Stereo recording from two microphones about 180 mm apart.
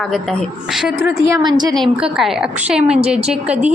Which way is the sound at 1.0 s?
15° right (ahead or behind).